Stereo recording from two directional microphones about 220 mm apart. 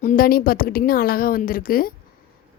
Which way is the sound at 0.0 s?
40° left (ahead or behind).